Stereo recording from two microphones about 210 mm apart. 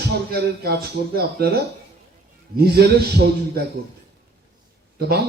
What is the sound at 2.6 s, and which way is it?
Speech, 50° right (ahead or behind).